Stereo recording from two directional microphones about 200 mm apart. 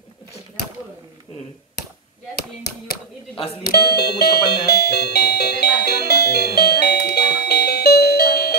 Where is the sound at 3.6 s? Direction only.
50° left (ahead or behind).